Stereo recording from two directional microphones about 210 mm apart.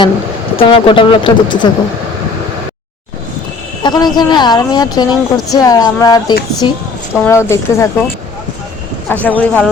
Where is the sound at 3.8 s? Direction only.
20° left (ahead or behind).